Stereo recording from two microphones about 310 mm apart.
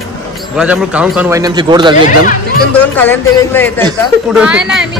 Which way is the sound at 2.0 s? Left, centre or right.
Left.